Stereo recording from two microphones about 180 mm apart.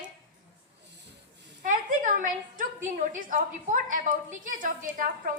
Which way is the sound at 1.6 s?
45° right (ahead or behind).